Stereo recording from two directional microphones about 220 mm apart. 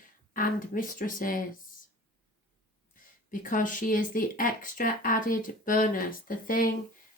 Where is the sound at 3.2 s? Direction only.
35° left (ahead or behind).